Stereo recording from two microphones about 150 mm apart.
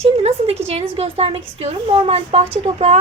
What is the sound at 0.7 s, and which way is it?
A woman's voice, 40° right (ahead or behind).